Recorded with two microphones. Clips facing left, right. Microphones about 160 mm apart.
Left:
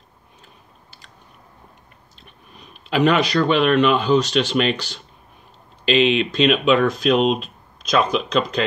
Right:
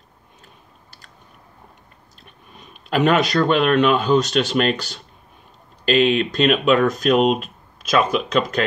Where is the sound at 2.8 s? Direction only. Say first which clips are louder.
Even; 45° right (ahead or behind).